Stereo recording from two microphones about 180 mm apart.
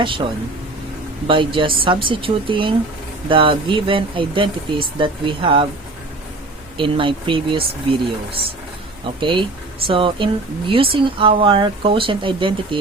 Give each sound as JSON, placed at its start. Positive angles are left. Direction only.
{"t": 1.3, "sound": "speech", "side_deg": -30}
{"t": 6.7, "sound": "speech", "side_deg": -30}
{"t": 9.0, "sound": "speech", "side_deg": -30}